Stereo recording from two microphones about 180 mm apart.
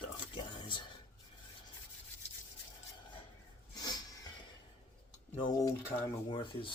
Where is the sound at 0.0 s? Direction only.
25° left (ahead or behind).